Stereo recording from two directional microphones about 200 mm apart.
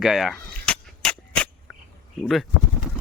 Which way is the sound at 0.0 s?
Centre (ahead or behind).